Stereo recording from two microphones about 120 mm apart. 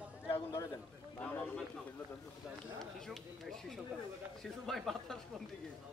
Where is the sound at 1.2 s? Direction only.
10° left (ahead or behind).